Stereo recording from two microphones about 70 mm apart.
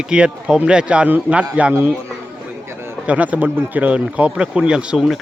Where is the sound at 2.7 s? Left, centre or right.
Right.